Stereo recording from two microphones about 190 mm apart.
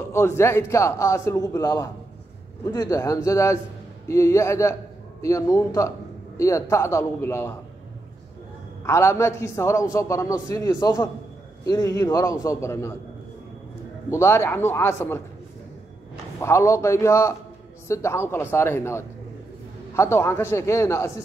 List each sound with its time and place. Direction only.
0.1 s a man's voice: 15° left (ahead or behind)
8.8 s a man's voice: 15° left (ahead or behind)
14.1 s a man's voice: 15° left (ahead or behind)
16.3 s a man's voice: 15° left (ahead or behind)